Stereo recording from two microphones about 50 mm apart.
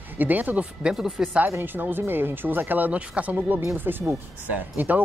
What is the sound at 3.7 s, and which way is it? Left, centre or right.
Speech, right.